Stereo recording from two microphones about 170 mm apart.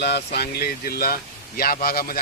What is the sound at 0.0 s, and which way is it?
Speech, 70° left (ahead or behind).